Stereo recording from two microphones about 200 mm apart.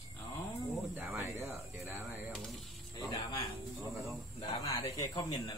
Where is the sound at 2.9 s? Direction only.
20° left (ahead or behind).